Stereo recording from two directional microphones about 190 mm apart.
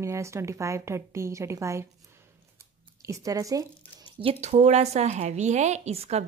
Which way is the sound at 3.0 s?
15° right (ahead or behind).